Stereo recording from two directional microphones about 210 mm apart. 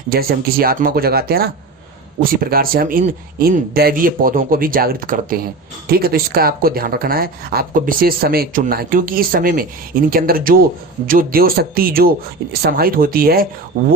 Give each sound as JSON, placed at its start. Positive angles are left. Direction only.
{"t": 0.1, "sound": "speech", "side_deg": -45}